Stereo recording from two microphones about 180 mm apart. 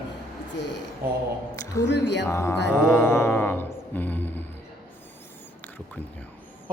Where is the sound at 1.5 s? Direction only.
15° left (ahead or behind).